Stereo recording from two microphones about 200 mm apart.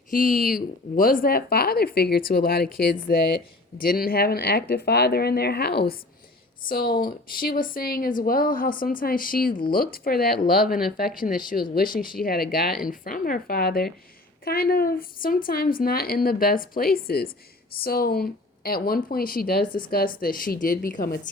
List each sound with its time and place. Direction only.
0.1 s speech: 45° left (ahead or behind)